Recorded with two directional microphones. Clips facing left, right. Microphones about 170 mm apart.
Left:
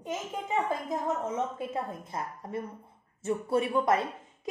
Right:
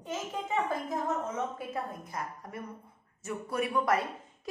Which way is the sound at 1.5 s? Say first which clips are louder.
Left 3 dB; 25° left (ahead or behind).